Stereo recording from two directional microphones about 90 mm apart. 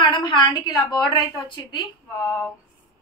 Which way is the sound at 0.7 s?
45° left (ahead or behind).